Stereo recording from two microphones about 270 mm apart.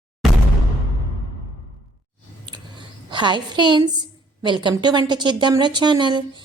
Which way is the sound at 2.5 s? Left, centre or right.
Centre.